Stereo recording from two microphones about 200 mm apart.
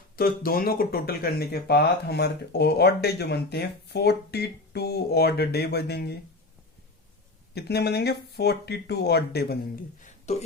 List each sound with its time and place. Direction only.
0.2 s speech: 45° left (ahead or behind)
7.5 s speech: 55° left (ahead or behind)
10.3 s speech: 35° left (ahead or behind)